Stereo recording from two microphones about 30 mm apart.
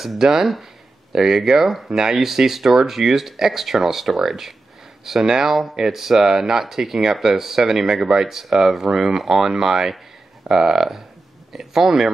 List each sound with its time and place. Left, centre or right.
0.2 s speech: centre
1.9 s speech: centre